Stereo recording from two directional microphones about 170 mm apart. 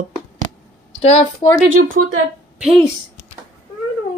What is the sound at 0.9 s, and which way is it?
Speech, 35° left (ahead or behind).